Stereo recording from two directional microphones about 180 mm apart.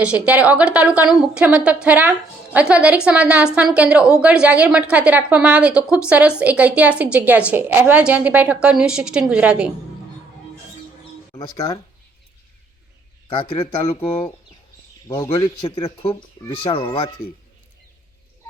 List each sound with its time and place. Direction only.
0.0 s a woman's voice: 10° right (ahead or behind)
11.3 s mouse: 15° left (ahead or behind)
13.3 s speech: 30° left (ahead or behind)
15.0 s a man's voice: 20° left (ahead or behind)